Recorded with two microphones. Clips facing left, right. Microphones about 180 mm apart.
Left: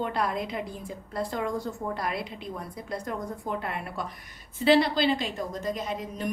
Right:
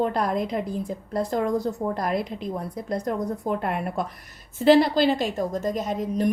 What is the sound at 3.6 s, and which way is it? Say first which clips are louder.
A woman's voice: right 7 dB; 50° right (ahead or behind).